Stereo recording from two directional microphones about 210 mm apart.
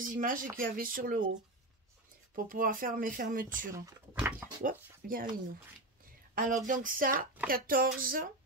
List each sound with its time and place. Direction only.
0.0 s speech: 40° right (ahead or behind)
2.3 s speech: 40° right (ahead or behind)
3.7 s speech: 10° right (ahead or behind)
4.6 s speech: 40° right (ahead or behind)
6.3 s speech: 40° right (ahead or behind)